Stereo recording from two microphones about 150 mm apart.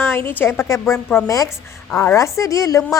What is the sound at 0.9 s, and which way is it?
Speech, 5° left (ahead or behind).